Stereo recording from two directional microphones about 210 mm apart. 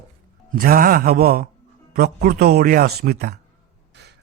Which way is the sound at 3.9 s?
55° right (ahead or behind).